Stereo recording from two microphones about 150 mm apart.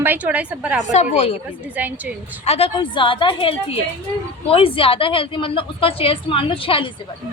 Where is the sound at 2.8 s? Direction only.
35° left (ahead or behind).